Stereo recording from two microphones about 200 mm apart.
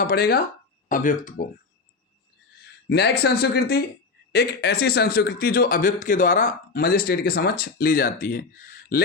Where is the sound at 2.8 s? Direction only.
55° left (ahead or behind).